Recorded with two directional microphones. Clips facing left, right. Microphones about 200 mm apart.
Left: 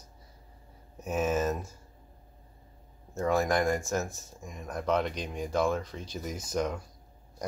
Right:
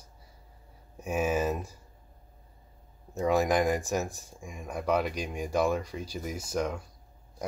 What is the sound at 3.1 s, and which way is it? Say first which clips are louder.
Speech: right 2 dB; 15° right (ahead or behind).